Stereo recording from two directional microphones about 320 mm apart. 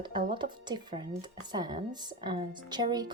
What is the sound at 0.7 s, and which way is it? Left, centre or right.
Speech, centre.